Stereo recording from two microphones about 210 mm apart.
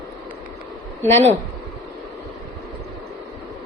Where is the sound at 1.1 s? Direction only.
30° right (ahead or behind).